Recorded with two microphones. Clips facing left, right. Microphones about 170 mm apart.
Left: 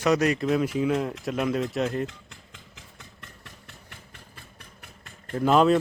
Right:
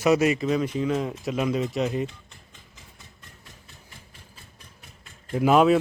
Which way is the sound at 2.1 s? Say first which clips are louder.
Left 2 dB; 90° left.